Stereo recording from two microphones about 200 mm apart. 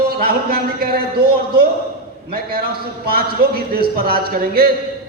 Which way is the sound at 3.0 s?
50° right (ahead or behind).